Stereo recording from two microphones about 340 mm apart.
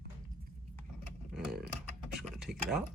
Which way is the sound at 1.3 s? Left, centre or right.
Centre.